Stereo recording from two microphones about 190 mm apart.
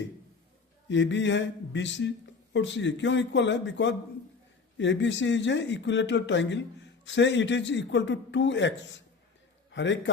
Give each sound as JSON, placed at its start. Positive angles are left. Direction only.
{"t": 0.9, "sound": "speech", "side_deg": 70}